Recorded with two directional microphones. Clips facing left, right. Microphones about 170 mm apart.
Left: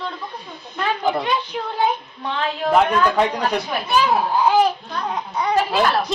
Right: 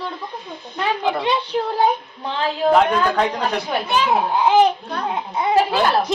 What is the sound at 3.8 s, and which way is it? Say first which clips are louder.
A child's voice: left 1 dB; 20° right (ahead or behind).